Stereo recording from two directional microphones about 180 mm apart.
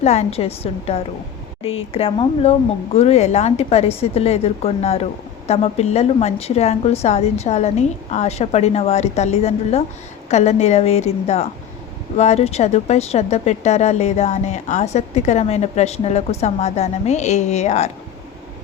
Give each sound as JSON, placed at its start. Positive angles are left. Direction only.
{"t": 0.0, "sound": "speech", "side_deg": 40}